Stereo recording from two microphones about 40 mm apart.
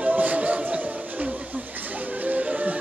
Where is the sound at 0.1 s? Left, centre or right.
Right.